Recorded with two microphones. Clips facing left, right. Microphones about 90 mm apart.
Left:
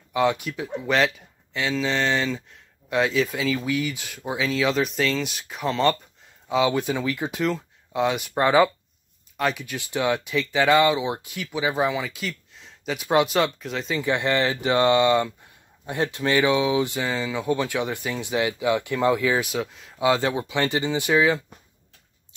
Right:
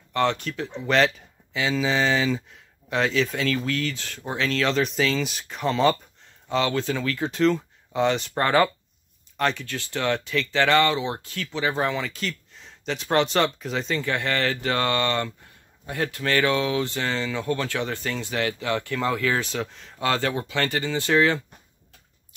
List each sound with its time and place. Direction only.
0.1 s speech: 10° left (ahead or behind)
6.5 s speech: 15° left (ahead or behind)
14.0 s speech: 20° left (ahead or behind)
20.1 s speech: 15° left (ahead or behind)